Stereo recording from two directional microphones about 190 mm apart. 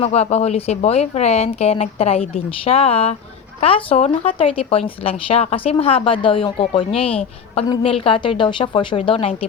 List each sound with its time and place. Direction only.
0.0 s speech: 35° left (ahead or behind)